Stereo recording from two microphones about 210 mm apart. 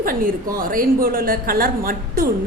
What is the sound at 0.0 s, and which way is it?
A woman's voice, 40° right (ahead or behind).